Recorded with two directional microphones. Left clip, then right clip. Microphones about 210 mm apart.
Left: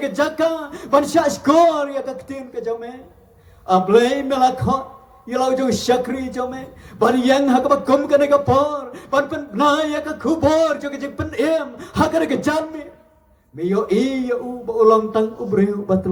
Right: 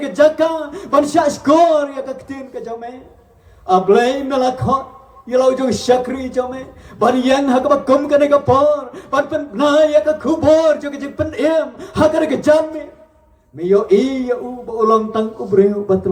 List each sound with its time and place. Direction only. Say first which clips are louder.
0.0 s speech: right 6 dB; 20° left (ahead or behind)